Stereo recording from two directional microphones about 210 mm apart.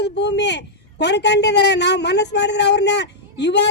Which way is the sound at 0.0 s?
55° left (ahead or behind).